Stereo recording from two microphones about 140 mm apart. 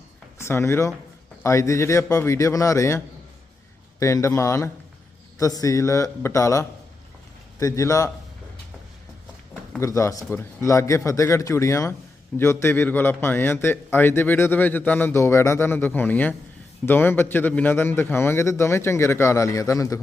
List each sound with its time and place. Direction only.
0.4 s speech: 20° left (ahead or behind)
4.0 s speech: 20° left (ahead or behind)
9.8 s a man's voice: 20° left (ahead or behind)